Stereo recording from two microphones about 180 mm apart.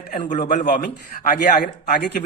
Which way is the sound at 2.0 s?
60° left (ahead or behind).